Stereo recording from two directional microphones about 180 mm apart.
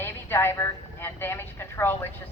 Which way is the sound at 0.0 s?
15° left (ahead or behind).